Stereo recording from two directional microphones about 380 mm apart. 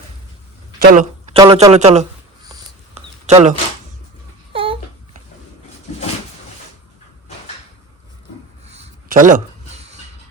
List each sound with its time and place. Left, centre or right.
0.8 s a man's voice: centre
2.5 s a sound: centre
4.5 s babbling: centre
8.6 s rub: centre